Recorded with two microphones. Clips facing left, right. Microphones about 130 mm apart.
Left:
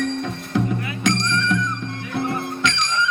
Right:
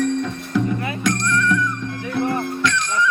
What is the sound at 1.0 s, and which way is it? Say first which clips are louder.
Music: right 1 dB; 20° left (ahead or behind).